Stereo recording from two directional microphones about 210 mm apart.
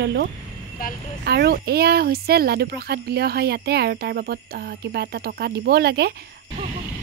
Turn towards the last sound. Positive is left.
turn(degrees=-50)  # may be behind; listen again after turning